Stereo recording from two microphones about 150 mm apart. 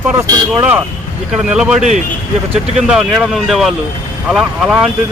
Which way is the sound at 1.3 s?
5° right (ahead or behind).